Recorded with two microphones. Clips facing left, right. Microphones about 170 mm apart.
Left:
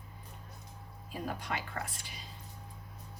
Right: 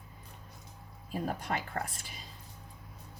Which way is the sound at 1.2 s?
45° right (ahead or behind).